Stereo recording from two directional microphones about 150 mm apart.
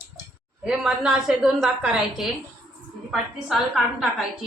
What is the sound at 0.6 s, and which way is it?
A woman's voice, 5° right (ahead or behind).